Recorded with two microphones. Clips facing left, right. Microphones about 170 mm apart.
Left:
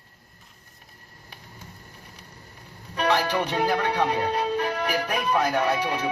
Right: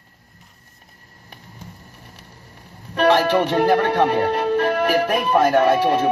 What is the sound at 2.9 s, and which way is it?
Speech, 60° right (ahead or behind).